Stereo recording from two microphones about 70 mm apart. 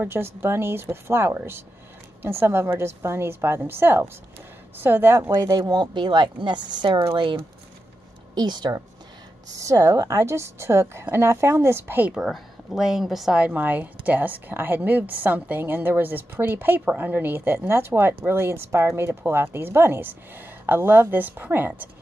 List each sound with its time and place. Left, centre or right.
0.0 s speech: right
5.3 s speech: right
8.4 s speech: right
9.6 s speech: right
12.3 s a woman's voice: centre
13.6 s speech: right